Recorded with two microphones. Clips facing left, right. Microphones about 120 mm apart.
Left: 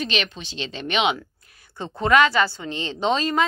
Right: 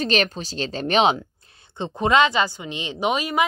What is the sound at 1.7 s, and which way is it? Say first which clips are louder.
A woman's voice: even; 20° right (ahead or behind).